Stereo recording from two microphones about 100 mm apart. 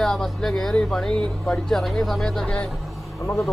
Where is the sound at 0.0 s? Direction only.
5° left (ahead or behind).